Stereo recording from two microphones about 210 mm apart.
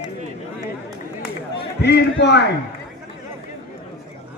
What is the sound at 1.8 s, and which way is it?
Speech, 55° left (ahead or behind).